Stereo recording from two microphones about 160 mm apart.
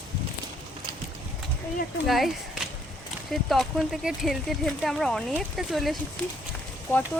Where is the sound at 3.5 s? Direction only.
Centre (ahead or behind).